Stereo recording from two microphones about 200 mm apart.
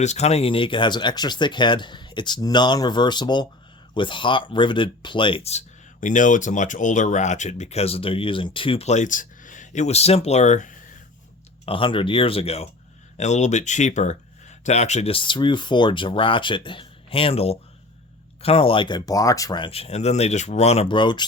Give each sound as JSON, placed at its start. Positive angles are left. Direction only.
{"t": 0.0, "sound": "speech", "side_deg": 35}
{"t": 11.6, "sound": "speech", "side_deg": 25}